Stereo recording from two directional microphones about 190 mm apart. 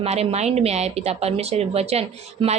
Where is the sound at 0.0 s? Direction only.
30° right (ahead or behind).